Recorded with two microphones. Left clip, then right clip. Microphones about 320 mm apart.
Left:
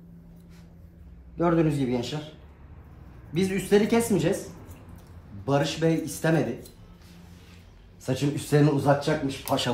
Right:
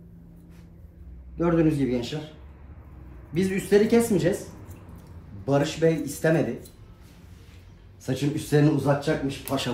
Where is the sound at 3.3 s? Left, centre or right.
Centre.